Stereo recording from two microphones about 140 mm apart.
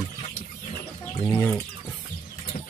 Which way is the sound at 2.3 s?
50° left (ahead or behind).